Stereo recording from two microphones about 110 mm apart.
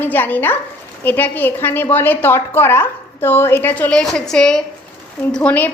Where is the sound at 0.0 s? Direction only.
15° left (ahead or behind).